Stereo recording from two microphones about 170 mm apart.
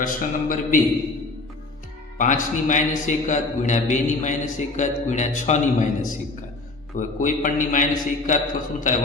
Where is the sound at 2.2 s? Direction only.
50° left (ahead or behind).